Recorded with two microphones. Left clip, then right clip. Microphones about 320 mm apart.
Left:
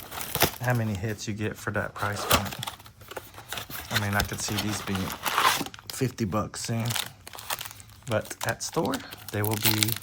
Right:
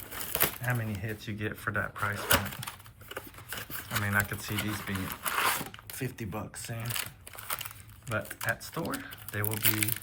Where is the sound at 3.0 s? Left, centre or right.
Left.